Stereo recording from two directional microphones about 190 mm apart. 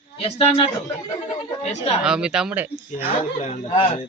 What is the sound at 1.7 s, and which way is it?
Speech, 35° left (ahead or behind).